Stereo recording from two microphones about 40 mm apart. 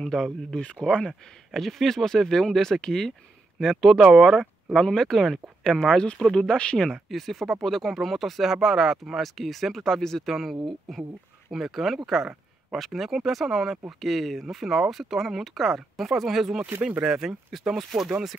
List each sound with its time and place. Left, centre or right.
0.0 s speech: centre
0.8 s speech: left
1.5 s speech: centre
3.5 s speech: centre
4.7 s speech: centre
7.1 s speech: centre
17.0 s speech: centre